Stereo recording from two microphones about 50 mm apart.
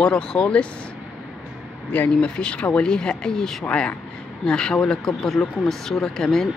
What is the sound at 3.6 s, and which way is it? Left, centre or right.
Speech, left.